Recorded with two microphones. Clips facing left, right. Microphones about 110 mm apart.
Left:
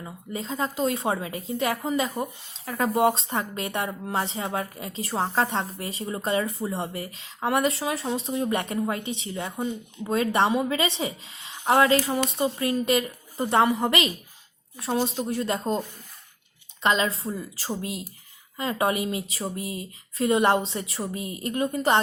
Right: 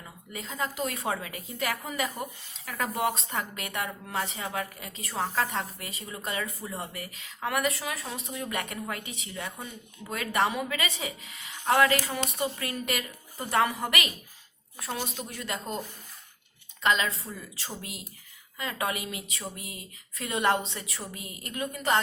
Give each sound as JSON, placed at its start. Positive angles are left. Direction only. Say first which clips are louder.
{"t": 0.0, "sound": "speech", "louder": "left 7 dB", "side_deg": 30}
{"t": 16.8, "sound": "speech", "louder": "left 3 dB", "side_deg": 30}